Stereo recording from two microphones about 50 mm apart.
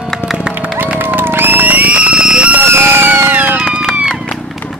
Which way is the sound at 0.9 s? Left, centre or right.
Right.